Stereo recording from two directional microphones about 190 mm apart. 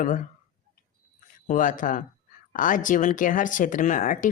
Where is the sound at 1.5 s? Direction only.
45° left (ahead or behind).